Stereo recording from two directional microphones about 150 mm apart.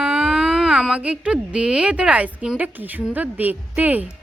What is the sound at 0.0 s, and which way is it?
Speech, 10° right (ahead or behind).